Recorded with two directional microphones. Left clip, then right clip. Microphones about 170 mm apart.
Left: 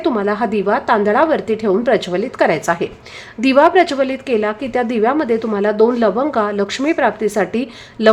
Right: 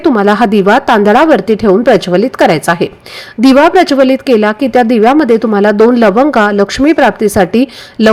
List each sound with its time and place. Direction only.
0.0 s a woman's voice: 35° right (ahead or behind)